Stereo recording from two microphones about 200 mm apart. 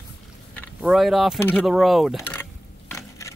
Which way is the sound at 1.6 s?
Centre (ahead or behind).